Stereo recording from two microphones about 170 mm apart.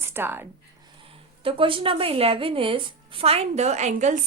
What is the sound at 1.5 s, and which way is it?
A woman's voice, 30° right (ahead or behind).